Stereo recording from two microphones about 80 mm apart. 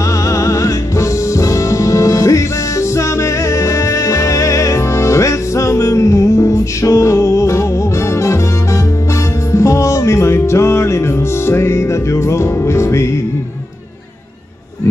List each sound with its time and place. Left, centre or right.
0.3 s music: left
9.5 s music: left